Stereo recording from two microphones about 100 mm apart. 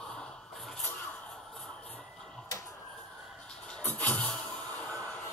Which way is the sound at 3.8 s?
15° left (ahead or behind).